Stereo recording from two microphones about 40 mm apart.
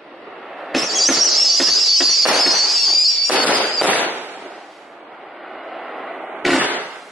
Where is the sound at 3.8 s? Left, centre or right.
Right.